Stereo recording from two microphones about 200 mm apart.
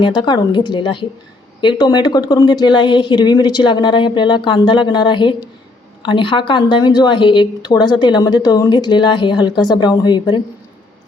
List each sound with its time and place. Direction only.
0.0 s a woman's voice: 25° left (ahead or behind)